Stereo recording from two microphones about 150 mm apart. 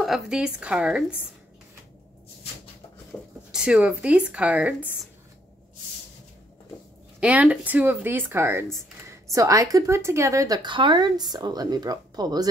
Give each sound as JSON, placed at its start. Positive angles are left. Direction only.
{"t": 0.0, "sound": "speech", "side_deg": -5}
{"t": 3.1, "sound": "a sound", "side_deg": 5}
{"t": 3.5, "sound": "speech", "side_deg": -5}
{"t": 7.2, "sound": "speech", "side_deg": -10}